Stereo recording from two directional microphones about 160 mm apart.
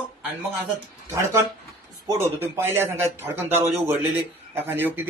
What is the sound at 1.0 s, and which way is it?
A man's voice, 20° right (ahead or behind).